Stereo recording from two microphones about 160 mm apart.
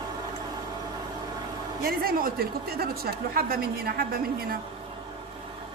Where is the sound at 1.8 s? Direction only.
70° right (ahead or behind).